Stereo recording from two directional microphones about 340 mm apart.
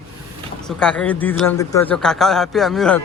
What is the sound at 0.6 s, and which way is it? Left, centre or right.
Speech, centre.